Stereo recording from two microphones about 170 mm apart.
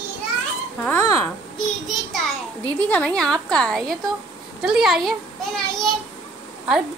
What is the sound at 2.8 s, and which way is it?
A woman's voice, 5° left (ahead or behind).